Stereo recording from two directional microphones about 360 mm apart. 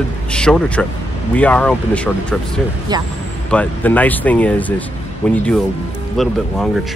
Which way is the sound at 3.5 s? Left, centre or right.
Centre.